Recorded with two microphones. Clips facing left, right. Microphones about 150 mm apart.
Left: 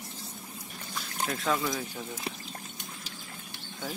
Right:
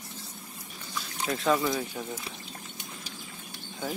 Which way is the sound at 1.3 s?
Centre (ahead or behind).